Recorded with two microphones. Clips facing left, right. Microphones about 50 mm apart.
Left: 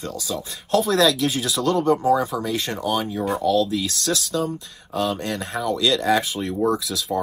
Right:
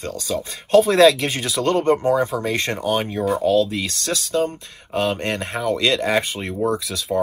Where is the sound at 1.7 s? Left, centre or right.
Right.